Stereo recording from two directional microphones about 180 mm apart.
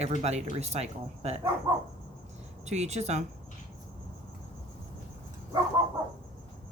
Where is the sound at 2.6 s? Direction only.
40° right (ahead or behind).